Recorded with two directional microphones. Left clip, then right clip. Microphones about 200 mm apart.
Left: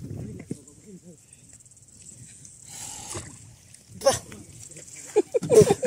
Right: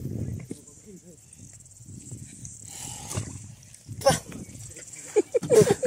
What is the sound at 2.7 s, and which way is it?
Wild animals, 45° left (ahead or behind).